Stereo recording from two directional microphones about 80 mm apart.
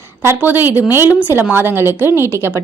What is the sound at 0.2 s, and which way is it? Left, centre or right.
A woman's voice, right.